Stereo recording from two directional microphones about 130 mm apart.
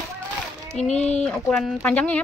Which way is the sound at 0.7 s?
60° left (ahead or behind).